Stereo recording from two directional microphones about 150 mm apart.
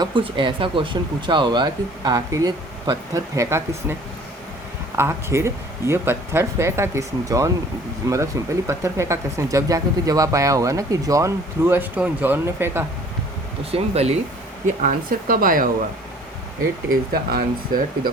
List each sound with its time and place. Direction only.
0.0 s speech: 35° right (ahead or behind); by 3.9 s 20° right (ahead or behind)
4.9 s speech: 15° right (ahead or behind)
13.7 s speech: 45° right (ahead or behind)
14.8 s speech: 65° right (ahead or behind)
16.9 s speech: 75° right (ahead or behind)